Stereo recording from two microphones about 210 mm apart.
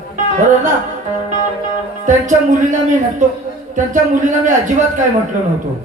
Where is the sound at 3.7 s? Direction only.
35° right (ahead or behind).